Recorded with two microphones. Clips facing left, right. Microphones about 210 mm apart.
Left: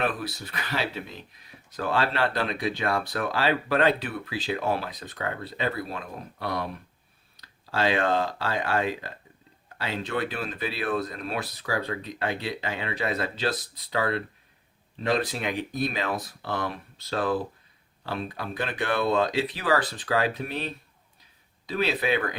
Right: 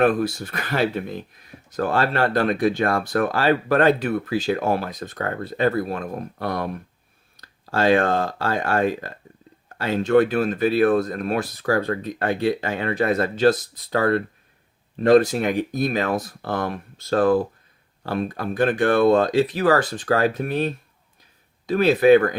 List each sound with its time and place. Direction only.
0.0 s speech: 45° right (ahead or behind)